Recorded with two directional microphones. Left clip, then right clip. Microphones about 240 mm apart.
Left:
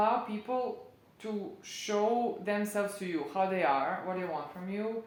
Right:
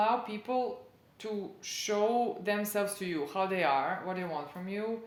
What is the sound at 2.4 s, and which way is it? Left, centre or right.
Speech, right.